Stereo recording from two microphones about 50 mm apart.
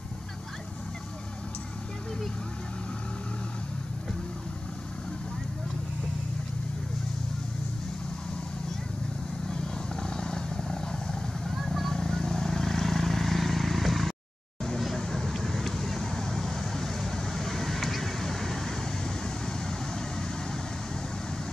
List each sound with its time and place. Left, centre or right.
9.5 s vehicle: centre
11.5 s vehicle: centre